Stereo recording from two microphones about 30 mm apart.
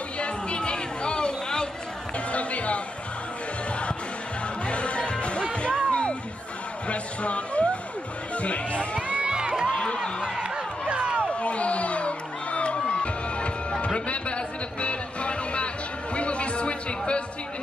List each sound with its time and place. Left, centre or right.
0.2 s chatter: left
2.1 s music: left
4.6 s music: left
6.9 s a sound: left
8.4 s music: left
9.2 s crowd: right
10.4 s music: right
11.2 s crowd: left
16.2 s music: left